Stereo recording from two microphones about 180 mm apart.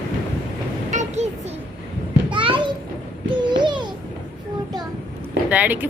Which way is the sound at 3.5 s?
25° right (ahead or behind).